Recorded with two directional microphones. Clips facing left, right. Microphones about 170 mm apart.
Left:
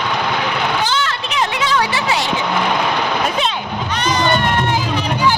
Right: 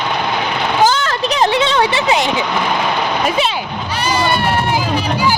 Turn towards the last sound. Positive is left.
turn(degrees=-10)  # may be behind; listen again after turning